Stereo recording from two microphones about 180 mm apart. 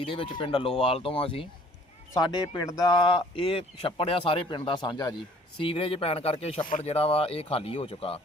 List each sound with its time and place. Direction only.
0.0 s speech: 30° left (ahead or behind)